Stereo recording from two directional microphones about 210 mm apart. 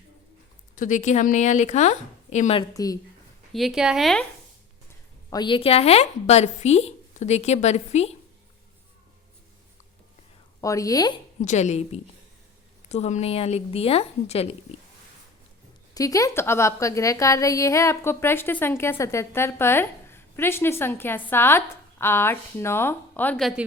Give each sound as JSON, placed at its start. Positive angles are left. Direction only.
{"t": 0.8, "sound": "a woman's voice", "side_deg": 35}
{"t": 2.7, "sound": "a woman's voice", "side_deg": 15}
{"t": 3.5, "sound": "speech", "side_deg": 0}
{"t": 5.3, "sound": "a woman's voice", "side_deg": 20}
{"t": 10.6, "sound": "a woman's voice", "side_deg": 15}
{"t": 11.4, "sound": "a woman's voice", "side_deg": 35}
{"t": 16.0, "sound": "a woman's voice", "side_deg": 15}